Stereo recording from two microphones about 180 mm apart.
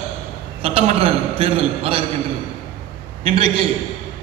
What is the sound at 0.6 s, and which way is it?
A man's voice, 30° right (ahead or behind).